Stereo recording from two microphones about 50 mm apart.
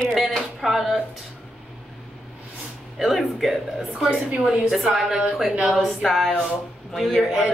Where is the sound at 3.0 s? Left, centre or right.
Centre.